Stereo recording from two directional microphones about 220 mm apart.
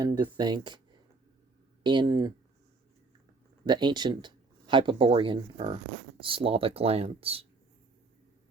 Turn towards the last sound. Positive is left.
turn(degrees=-25)  # may be behind; listen again after turning